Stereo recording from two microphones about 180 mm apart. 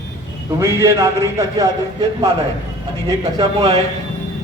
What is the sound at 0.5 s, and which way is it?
A man's voice, 15° right (ahead or behind).